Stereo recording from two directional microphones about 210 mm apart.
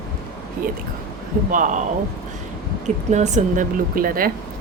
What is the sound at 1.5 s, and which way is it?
Speech, 35° right (ahead or behind).